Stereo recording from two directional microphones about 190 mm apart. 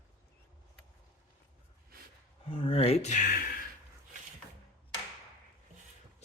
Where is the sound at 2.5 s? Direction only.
30° left (ahead or behind); by 3.5 s 45° left (ahead or behind).